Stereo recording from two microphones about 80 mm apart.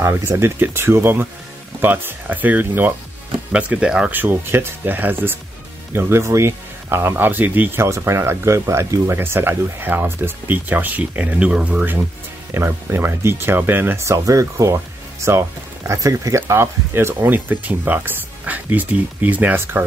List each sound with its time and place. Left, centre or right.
0.1 s speech: right
3.5 s speech: centre
4.1 s speech: right
7.8 s speech: right
12.5 s speech: right
14.0 s speech: right